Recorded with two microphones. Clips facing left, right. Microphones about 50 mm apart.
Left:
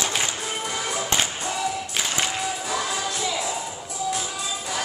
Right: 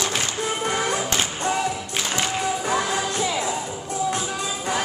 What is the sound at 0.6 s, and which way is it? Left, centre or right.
Music, right.